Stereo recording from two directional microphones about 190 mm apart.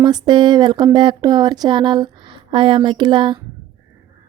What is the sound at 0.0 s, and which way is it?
Speech, 20° right (ahead or behind).